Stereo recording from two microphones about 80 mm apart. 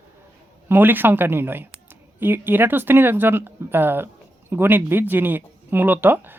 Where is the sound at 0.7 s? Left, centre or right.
Right.